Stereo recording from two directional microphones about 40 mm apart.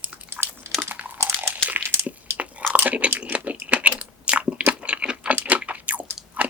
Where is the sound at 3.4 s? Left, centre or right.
Right.